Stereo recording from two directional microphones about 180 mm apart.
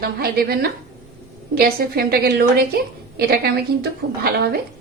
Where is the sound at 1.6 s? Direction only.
55° right (ahead or behind).